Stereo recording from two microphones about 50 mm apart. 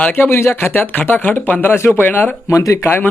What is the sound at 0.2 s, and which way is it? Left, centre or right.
Speech, left.